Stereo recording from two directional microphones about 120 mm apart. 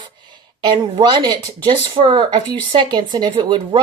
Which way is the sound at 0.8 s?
40° right (ahead or behind).